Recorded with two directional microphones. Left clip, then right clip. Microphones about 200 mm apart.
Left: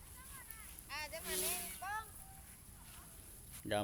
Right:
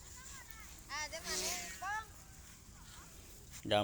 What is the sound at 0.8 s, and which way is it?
Vehicle, 30° right (ahead or behind).